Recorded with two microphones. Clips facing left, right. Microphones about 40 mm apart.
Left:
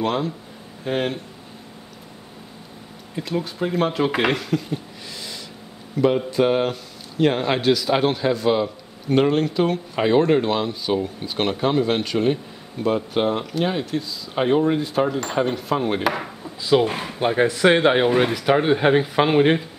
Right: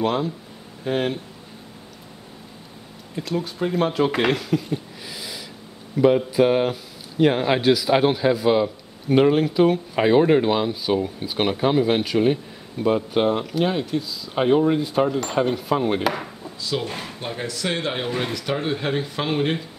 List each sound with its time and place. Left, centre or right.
0.0 s speech: centre
3.2 s speech: centre
16.6 s speech: left